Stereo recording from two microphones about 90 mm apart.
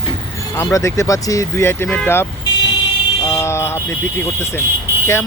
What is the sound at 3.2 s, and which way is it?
Vehicle, 35° left (ahead or behind).